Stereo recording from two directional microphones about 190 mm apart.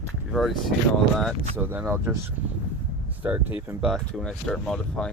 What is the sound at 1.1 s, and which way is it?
Speech, centre (ahead or behind).